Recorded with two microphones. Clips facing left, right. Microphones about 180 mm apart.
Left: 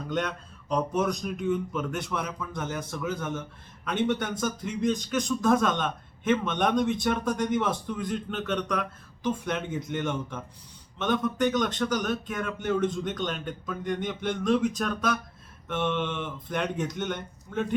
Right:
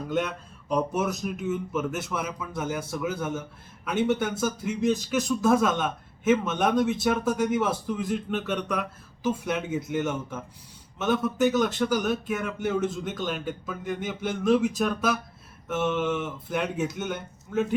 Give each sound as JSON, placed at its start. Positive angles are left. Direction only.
{"t": 0.1, "sound": "speech", "side_deg": -5}